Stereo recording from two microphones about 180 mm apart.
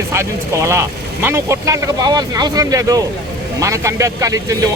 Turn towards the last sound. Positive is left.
turn(degrees=-20)  # may be behind; listen again after turning